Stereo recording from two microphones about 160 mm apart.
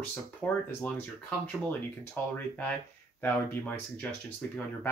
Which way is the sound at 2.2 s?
10° left (ahead or behind).